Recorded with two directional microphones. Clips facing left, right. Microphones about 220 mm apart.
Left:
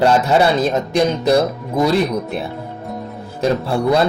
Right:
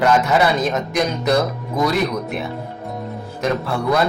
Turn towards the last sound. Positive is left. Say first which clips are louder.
# left 3 dB
turn(degrees=30)  # may be behind; listen again after turning